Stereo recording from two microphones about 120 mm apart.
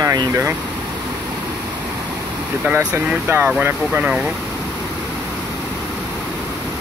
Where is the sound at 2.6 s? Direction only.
10° right (ahead or behind).